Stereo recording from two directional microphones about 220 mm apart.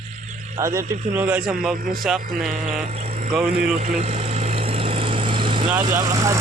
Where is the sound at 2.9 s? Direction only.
30° right (ahead or behind).